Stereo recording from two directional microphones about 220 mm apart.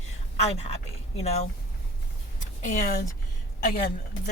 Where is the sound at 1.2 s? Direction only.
30° left (ahead or behind).